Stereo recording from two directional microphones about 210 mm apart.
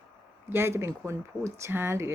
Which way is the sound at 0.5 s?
10° right (ahead or behind).